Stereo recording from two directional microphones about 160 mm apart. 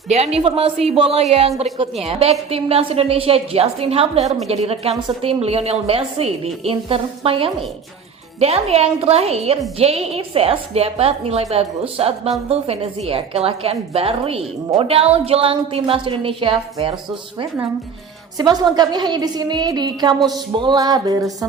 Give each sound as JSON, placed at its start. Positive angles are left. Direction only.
{"t": 0.1, "sound": "a woman's voice", "side_deg": -40}
{"t": 18.3, "sound": "a woman's voice", "side_deg": -25}